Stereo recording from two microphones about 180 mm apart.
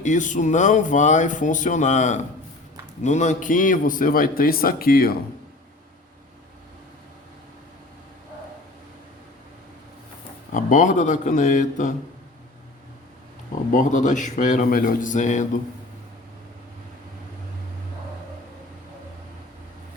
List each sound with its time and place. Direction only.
0.0 s speech: 45° left (ahead or behind)
10.5 s speech: 45° left (ahead or behind)
13.7 s speech: 45° left (ahead or behind)